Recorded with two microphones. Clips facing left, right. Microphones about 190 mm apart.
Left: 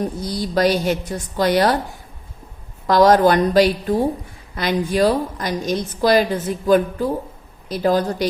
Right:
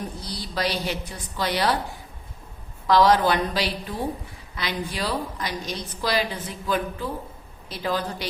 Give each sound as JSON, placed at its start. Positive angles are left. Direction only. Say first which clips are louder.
{"t": 0.2, "sound": "a woman's voice", "louder": "left 10 dB", "side_deg": 45}
{"t": 2.8, "sound": "a woman's voice", "louder": "left 5 dB", "side_deg": 45}